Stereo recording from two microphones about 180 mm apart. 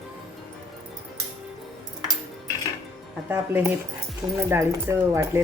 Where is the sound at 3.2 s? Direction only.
10° right (ahead or behind).